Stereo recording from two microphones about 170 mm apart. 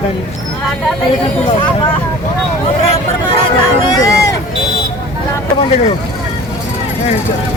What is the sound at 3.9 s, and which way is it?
Run, 20° left (ahead or behind).